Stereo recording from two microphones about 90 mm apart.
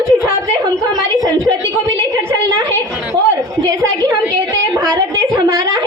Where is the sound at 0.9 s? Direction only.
45° right (ahead or behind).